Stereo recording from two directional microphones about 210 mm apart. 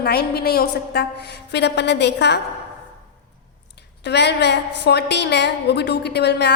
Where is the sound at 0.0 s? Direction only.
50° left (ahead or behind).